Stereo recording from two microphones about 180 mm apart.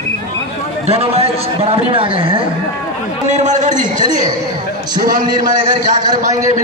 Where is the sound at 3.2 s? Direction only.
40° right (ahead or behind).